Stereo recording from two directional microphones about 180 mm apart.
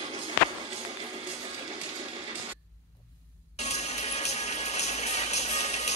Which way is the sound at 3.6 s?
35° left (ahead or behind).